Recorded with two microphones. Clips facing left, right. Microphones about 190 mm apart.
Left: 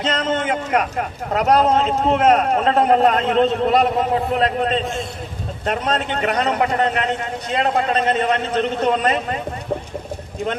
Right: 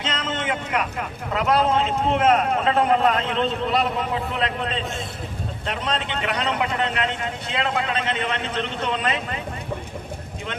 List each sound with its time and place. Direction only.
0.0 s a man's voice: 45° left (ahead or behind)